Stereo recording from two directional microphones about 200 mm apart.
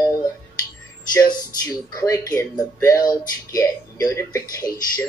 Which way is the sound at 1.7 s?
15° left (ahead or behind).